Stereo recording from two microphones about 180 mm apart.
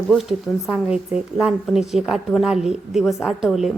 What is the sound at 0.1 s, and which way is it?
A woman's voice, centre (ahead or behind).